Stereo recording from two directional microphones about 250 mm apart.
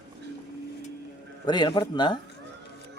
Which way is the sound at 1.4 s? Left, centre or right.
Centre.